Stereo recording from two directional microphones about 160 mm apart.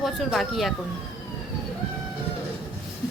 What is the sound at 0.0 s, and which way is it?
Speech, centre (ahead or behind).